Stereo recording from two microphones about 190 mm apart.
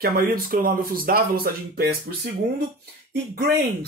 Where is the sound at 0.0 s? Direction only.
50° right (ahead or behind).